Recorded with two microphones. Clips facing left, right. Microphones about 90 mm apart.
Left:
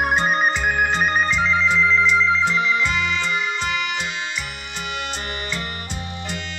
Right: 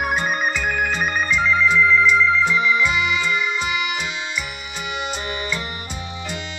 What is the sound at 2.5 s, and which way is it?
Music, 15° right (ahead or behind).